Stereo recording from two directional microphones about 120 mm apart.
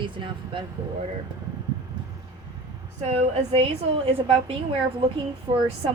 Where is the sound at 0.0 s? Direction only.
45° right (ahead or behind).